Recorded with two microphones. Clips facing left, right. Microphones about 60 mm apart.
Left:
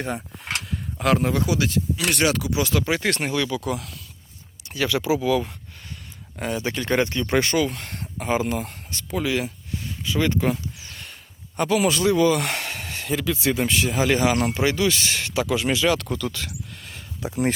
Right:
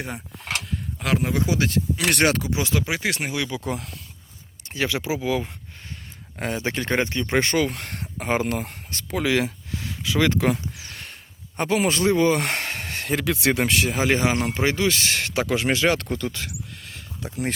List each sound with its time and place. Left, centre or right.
0.7 s a sound: centre
1.3 s speech: right
1.5 s speech: right
2.0 s speech: right
2.6 s speech: right
3.5 s speech: right
7.3 s speech: right
9.3 s speech: right
10.8 s a sound: right
11.5 s speech: right
13.0 s a sound: right
13.2 s speech: right
13.9 s speech: right
16.8 s a sound: centre